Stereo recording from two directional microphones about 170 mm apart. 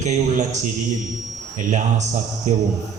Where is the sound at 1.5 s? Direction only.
45° right (ahead or behind).